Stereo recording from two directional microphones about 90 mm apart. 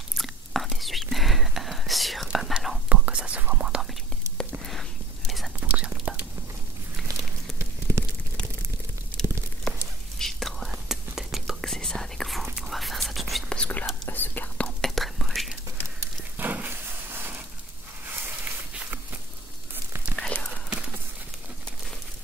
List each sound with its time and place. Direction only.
0.2 s whispering: centre (ahead or behind)
2.9 s whispering: 15° right (ahead or behind)
4.6 s whispering: centre (ahead or behind)
5.6 s whispering: 15° right (ahead or behind)
8.0 s a sound: 30° right (ahead or behind)
9.2 s a sound: 5° left (ahead or behind)
9.7 s whispering: 5° left (ahead or behind)
13.6 s whispering: 15° left (ahead or behind)
14.8 s whispering: centre (ahead or behind)
16.3 s a sound: 20° right (ahead or behind)
20.2 s whispering: 10° left (ahead or behind)